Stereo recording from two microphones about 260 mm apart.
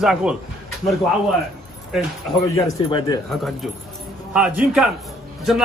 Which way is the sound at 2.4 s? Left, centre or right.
Centre.